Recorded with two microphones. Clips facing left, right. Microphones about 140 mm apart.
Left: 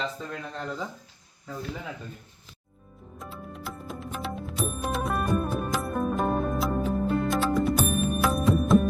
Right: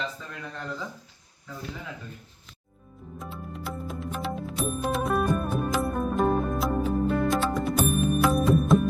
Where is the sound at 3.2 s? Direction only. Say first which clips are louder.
Right 1 dB; centre (ahead or behind).